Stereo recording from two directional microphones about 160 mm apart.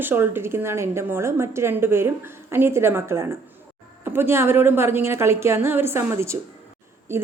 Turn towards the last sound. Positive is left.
turn(degrees=-15)  # may be behind; listen again after turning